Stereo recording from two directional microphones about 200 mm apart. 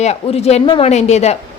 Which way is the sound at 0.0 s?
30° left (ahead or behind).